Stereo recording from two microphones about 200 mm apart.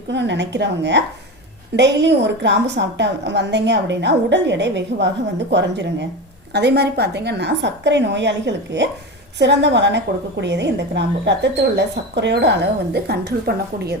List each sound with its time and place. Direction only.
0.1 s a woman's voice: 60° right (ahead or behind)